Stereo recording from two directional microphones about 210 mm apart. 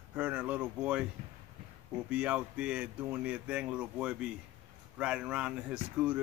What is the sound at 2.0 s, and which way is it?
Speech, 5° right (ahead or behind).